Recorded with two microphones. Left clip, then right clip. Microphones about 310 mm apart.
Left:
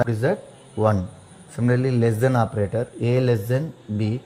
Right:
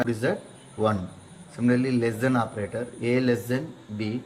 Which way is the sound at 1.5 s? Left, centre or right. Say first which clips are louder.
Left 2 dB; left.